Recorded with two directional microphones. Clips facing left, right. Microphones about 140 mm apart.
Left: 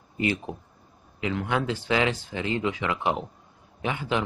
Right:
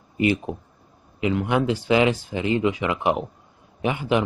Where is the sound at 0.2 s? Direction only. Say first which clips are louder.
Right 6 dB; 15° right (ahead or behind).